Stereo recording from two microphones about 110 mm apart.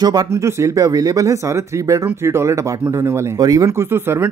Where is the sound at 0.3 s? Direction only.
25° right (ahead or behind).